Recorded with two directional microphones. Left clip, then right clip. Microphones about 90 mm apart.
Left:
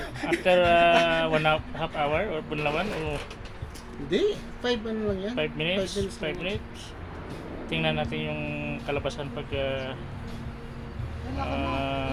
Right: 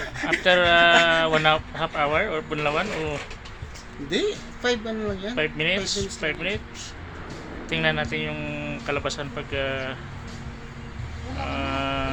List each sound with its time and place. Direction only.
0.5 s speech: 25° right (ahead or behind)
4.1 s speech: 20° left (ahead or behind)
5.3 s speech: 20° right (ahead or behind)
7.7 s speech: 10° right (ahead or behind)
11.4 s sheep: 10° right (ahead or behind)